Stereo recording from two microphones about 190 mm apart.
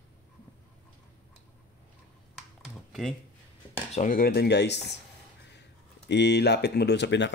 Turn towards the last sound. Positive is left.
turn(degrees=65)  # may be behind; listen again after turning